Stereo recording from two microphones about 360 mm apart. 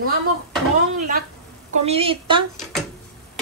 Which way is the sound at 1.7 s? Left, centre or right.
Centre.